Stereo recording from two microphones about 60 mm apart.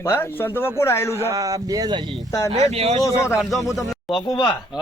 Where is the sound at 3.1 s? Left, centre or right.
Left.